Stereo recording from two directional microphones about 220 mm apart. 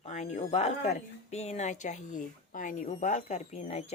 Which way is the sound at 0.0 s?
30° left (ahead or behind).